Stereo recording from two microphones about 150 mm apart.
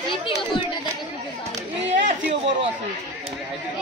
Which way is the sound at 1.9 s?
50° right (ahead or behind).